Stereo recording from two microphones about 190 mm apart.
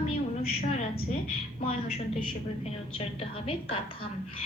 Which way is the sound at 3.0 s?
30° left (ahead or behind).